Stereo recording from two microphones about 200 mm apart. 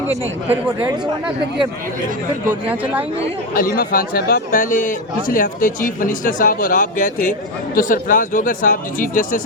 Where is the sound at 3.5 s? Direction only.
45° left (ahead or behind).